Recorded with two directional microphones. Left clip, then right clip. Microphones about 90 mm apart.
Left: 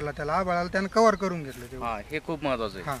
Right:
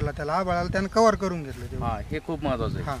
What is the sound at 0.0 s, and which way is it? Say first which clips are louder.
Speech: right 1 dB; 5° right (ahead or behind).